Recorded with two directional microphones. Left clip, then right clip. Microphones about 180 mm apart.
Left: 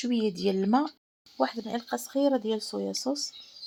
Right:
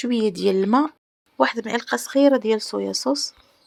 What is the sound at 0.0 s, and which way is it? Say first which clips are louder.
Speech: right 7 dB; 45° right (ahead or behind).